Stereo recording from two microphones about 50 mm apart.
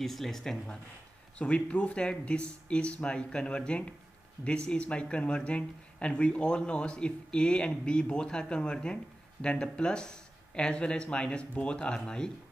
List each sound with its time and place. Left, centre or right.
0.0 s speech: centre
1.4 s speech: left